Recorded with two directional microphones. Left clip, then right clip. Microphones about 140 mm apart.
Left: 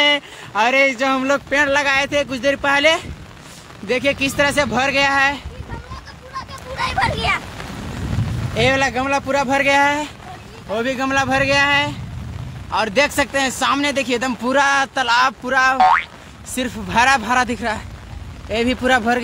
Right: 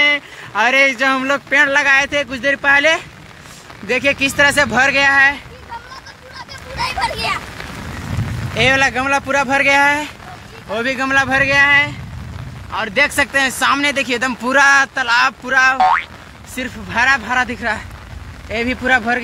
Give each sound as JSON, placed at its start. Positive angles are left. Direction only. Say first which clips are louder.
{"t": 0.0, "sound": "a sound", "louder": "right 2 dB", "side_deg": 25}
{"t": 0.5, "sound": "speech", "louder": "right 2 dB", "side_deg": 10}
{"t": 3.8, "sound": "speech", "louder": "right 3 dB", "side_deg": 0}
{"t": 5.0, "sound": "speech", "louder": "right 4 dB", "side_deg": 15}
{"t": 8.5, "sound": "speech", "louder": "right 3 dB", "side_deg": 10}
{"t": 15.0, "sound": "speech", "louder": "right 1 dB", "side_deg": 25}
{"t": 15.8, "sound": "speech", "louder": "even", "side_deg": 0}
{"t": 16.5, "sound": "speech", "louder": "left 1 dB", "side_deg": 35}